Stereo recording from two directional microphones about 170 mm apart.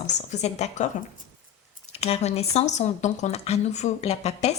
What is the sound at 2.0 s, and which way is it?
Speech, 40° left (ahead or behind).